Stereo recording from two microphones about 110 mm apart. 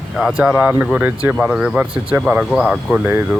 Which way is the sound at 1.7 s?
10° right (ahead or behind).